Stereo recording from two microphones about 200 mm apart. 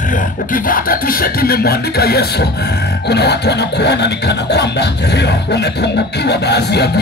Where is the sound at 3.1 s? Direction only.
55° left (ahead or behind).